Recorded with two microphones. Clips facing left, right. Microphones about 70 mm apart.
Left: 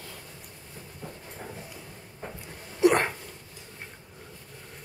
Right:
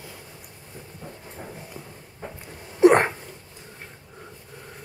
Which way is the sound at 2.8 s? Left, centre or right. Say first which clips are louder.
Right 6 dB; right.